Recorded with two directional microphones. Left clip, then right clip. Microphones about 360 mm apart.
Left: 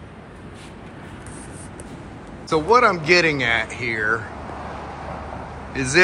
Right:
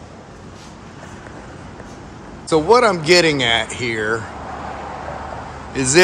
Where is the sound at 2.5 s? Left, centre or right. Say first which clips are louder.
Right 3 dB; centre.